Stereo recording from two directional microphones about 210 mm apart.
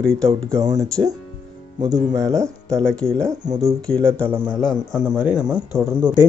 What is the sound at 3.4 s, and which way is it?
Speech, 30° right (ahead or behind).